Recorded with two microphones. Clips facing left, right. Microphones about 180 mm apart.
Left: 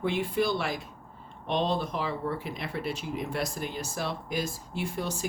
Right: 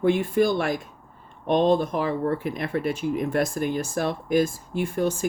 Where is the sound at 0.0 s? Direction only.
50° right (ahead or behind).